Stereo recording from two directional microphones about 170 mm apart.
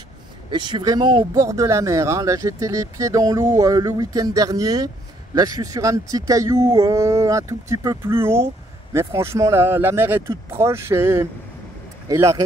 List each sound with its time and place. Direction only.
0.5 s speech: 25° right (ahead or behind)